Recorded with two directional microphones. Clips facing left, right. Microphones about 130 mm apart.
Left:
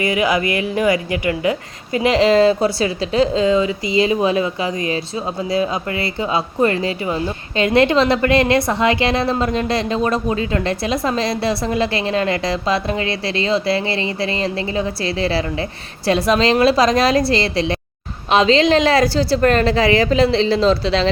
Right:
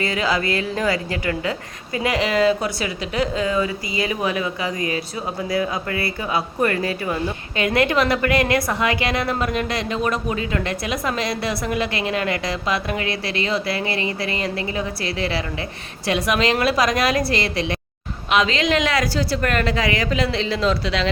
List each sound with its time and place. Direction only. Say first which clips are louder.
0.0 s a woman's voice: left 4 dB; 15° left (ahead or behind); by 21.1 s 30° left (ahead or behind)